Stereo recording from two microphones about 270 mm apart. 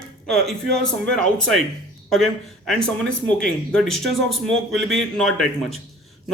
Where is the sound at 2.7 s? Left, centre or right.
Centre.